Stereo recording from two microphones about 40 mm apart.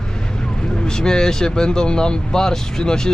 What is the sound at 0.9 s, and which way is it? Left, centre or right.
Speech, centre.